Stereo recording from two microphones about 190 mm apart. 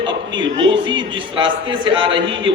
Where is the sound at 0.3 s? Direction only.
80° right.